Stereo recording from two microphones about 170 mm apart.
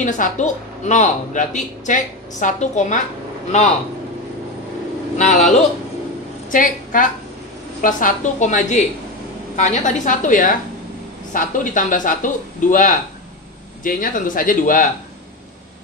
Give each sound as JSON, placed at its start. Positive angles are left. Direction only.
{"t": 0.0, "sound": "speech", "side_deg": 45}
{"t": 5.1, "sound": "speech", "side_deg": 45}
{"t": 6.5, "sound": "a woman's voice", "side_deg": 50}